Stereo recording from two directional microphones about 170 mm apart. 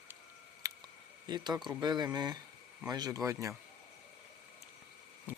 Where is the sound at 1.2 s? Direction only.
25° right (ahead or behind).